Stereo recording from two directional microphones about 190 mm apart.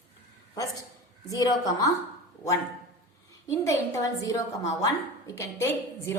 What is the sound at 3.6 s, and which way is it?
A woman's voice, 15° left (ahead or behind).